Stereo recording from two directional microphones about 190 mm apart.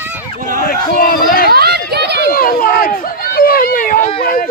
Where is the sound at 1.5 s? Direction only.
55° right (ahead or behind).